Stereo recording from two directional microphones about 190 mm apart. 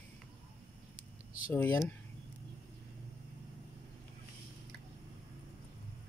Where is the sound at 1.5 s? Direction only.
10° left (ahead or behind).